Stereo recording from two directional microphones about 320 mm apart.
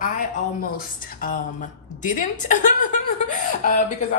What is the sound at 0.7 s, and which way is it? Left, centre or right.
A woman's voice, left.